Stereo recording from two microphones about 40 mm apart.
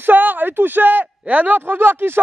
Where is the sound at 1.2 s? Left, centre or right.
Right.